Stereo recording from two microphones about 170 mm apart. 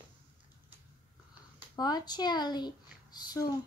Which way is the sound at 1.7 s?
25° left (ahead or behind).